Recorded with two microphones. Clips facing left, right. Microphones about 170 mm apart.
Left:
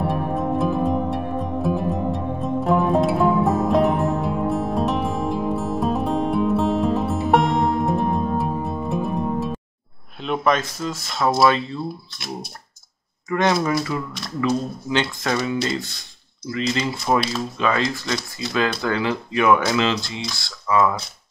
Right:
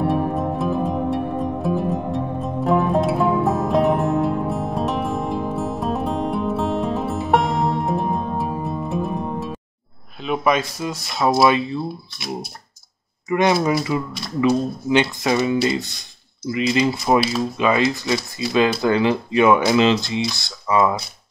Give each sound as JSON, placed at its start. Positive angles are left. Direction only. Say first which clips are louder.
{"t": 0.0, "sound": "music", "louder": "right 2 dB", "side_deg": 0}
{"t": 10.2, "sound": "speech", "louder": "right 1 dB", "side_deg": -5}
{"t": 13.3, "sound": "speech", "louder": "right 2 dB", "side_deg": -15}